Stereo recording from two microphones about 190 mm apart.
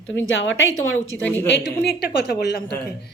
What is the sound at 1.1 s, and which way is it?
Speech, 10° left (ahead or behind).